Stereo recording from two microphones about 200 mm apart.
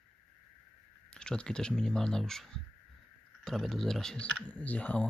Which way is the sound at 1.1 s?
5° left (ahead or behind).